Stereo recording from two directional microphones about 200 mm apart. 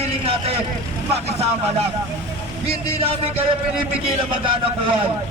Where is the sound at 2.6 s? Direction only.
30° right (ahead or behind).